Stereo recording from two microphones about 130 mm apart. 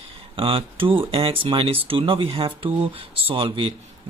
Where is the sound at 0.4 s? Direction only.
45° right (ahead or behind).